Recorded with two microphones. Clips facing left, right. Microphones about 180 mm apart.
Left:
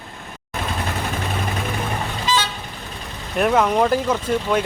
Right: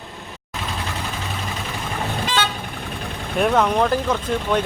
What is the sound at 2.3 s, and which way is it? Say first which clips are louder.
Vehicle: left 3 dB; 60° right (ahead or behind).